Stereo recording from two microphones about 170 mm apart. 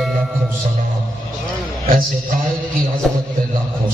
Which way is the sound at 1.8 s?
60° right (ahead or behind).